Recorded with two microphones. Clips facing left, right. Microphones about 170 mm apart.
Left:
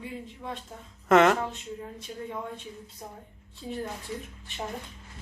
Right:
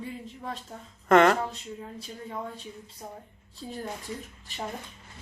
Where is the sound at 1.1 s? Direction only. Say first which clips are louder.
Even; centre (ahead or behind).